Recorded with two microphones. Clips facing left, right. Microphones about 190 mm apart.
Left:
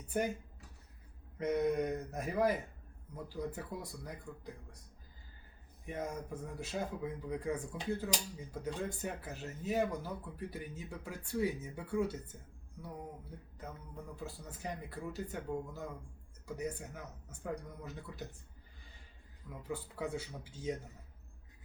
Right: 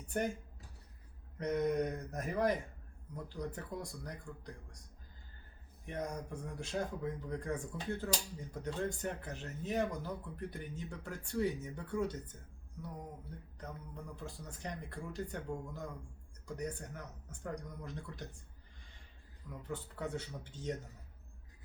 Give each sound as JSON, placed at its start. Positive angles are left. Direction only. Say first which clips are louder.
{"t": 0.1, "sound": "speech", "louder": "left 1 dB", "side_deg": 5}
{"t": 1.4, "sound": "speech", "louder": "left 1 dB", "side_deg": 5}
{"t": 5.8, "sound": "speech", "louder": "even", "side_deg": 5}
{"t": 13.6, "sound": "speech", "louder": "even", "side_deg": 5}
{"t": 19.6, "sound": "speech", "louder": "left 2 dB", "side_deg": 10}